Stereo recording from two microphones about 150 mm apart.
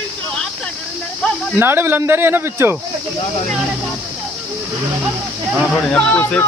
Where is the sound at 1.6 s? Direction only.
15° right (ahead or behind).